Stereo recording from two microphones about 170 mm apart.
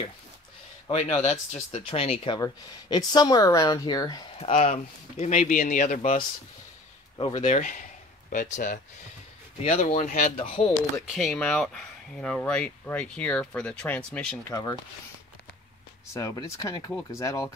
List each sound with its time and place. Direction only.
1.2 s speech: 45° left (ahead or behind); by 4.2 s 25° left (ahead or behind)
4.4 s speech: 35° left (ahead or behind)
7.2 s speech: 30° left (ahead or behind)
7.4 s speech: 45° left (ahead or behind)
9.6 s speech: 40° left (ahead or behind)
9.9 s speech: 50° left (ahead or behind)
10.3 s speech: 35° left (ahead or behind)
11.0 s speech: centre (ahead or behind)
14.5 s speech: 20° left (ahead or behind)
16.1 s speech: 20° left (ahead or behind)